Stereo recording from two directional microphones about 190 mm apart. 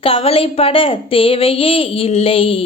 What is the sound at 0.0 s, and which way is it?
A woman's voice, 30° left (ahead or behind).